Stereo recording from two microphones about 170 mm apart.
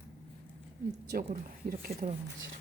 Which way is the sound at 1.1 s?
55° right (ahead or behind).